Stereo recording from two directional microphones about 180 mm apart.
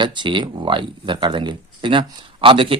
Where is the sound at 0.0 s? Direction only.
25° right (ahead or behind).